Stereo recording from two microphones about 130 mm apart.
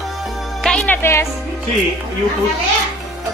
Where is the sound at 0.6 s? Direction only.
10° left (ahead or behind).